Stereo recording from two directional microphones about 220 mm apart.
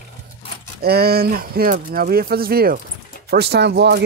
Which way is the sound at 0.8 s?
45° right (ahead or behind).